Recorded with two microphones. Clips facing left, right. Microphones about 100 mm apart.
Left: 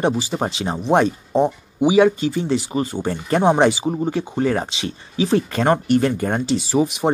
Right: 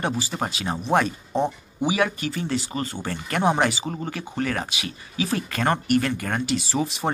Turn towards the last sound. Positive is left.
turn(degrees=20)  # may be behind; listen again after turning